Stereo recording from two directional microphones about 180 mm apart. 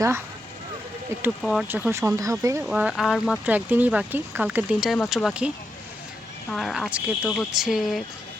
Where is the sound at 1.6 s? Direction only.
10° right (ahead or behind).